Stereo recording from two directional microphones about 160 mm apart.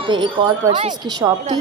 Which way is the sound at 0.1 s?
30° right (ahead or behind).